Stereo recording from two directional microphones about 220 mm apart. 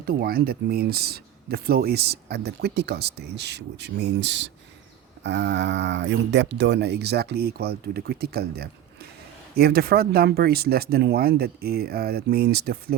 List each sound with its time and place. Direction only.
0.0 s speech: 45° right (ahead or behind)